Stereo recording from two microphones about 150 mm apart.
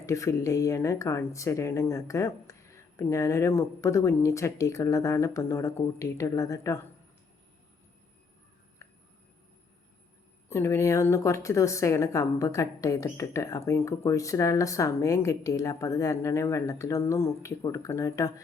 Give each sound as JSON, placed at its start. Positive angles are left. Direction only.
{"t": 0.0, "sound": "speech", "side_deg": 20}
{"t": 10.5, "sound": "speech", "side_deg": 15}